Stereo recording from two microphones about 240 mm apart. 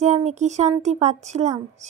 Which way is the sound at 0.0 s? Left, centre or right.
Right.